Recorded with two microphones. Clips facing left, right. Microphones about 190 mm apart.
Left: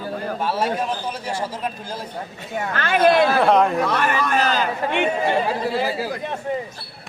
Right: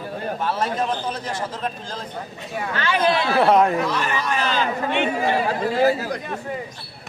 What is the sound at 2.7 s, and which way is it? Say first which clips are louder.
Speech: left 4 dB; 50° left (ahead or behind).